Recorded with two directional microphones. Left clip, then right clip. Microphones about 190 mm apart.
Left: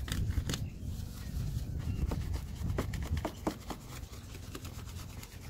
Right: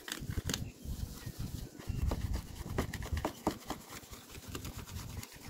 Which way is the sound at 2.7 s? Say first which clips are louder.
Right 1 dB; 15° right (ahead or behind).